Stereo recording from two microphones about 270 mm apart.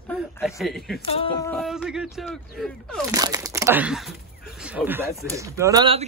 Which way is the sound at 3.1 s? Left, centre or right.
Centre.